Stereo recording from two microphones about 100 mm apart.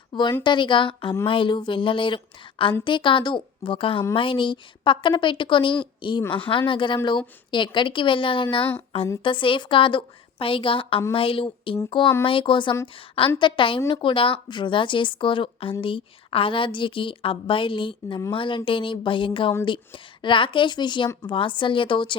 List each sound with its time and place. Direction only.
0.1 s a woman's voice: 50° left (ahead or behind)